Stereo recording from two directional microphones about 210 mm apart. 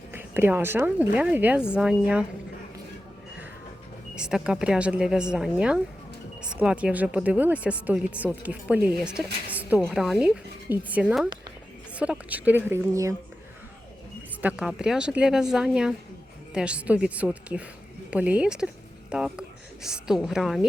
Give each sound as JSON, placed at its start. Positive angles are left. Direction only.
{"t": 0.1, "sound": "a woman's voice", "side_deg": -10}
{"t": 4.1, "sound": "a woman's voice", "side_deg": -5}
{"t": 14.4, "sound": "a woman's voice", "side_deg": -5}